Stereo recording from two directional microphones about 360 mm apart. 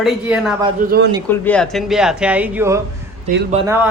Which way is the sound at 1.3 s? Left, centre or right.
Centre.